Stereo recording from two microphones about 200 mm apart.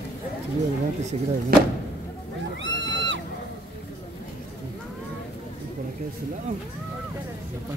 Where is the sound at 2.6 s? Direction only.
65° right (ahead or behind).